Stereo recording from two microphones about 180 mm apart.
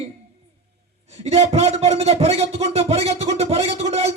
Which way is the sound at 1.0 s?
35° right (ahead or behind).